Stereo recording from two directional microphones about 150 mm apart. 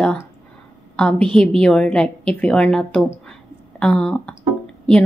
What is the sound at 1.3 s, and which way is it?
A woman's voice, 5° left (ahead or behind).